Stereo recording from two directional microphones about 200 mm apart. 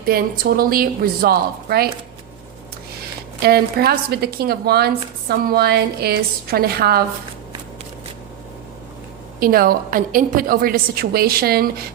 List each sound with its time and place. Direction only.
0.0 s a woman's voice: 45° right (ahead or behind)
3.4 s a woman's voice: 50° right (ahead or behind)
9.4 s a woman's voice: 45° right (ahead or behind)